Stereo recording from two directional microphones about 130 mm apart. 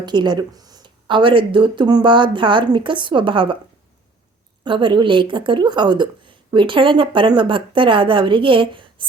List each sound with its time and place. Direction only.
0.0 s speech: 35° right (ahead or behind)
4.6 s speech: 40° right (ahead or behind)